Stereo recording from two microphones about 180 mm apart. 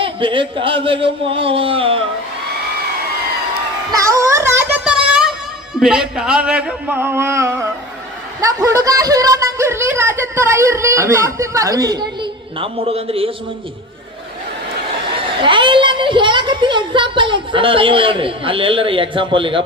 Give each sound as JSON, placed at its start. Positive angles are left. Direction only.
{"t": 0.0, "sound": "a woman's voice", "side_deg": -30}
{"t": 3.9, "sound": "child singing", "side_deg": -15}
{"t": 5.8, "sound": "a woman's voice", "side_deg": -5}
{"t": 15.4, "sound": "a woman's voice", "side_deg": -25}